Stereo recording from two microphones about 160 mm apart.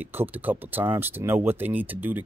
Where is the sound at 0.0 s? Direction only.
10° right (ahead or behind).